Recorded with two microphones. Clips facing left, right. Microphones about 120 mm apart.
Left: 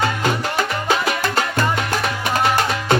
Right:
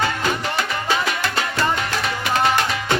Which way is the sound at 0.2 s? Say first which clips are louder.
Left 2 dB; 45° left (ahead or behind).